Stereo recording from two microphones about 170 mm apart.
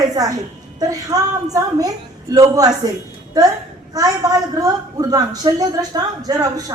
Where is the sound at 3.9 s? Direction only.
20° right (ahead or behind).